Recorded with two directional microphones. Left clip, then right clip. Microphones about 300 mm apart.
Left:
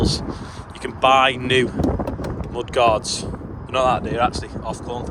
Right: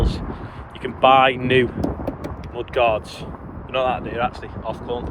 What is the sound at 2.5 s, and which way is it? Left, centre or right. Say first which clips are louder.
Speech: left 2 dB; left.